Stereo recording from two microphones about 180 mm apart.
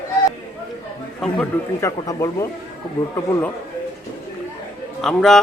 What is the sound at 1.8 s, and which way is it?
Speech, 15° left (ahead or behind).